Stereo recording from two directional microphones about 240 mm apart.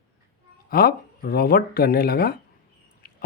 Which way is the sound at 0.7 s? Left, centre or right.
Left.